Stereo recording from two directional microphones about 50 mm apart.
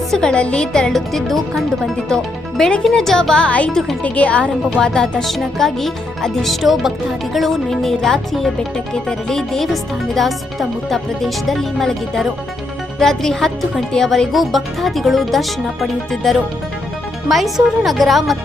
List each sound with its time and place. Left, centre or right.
0.1 s speech: centre
0.9 s music: centre
2.0 s speech: centre
3.3 s a woman's voice: left
4.8 s music: centre
13.0 s speech: centre
13.9 s music: centre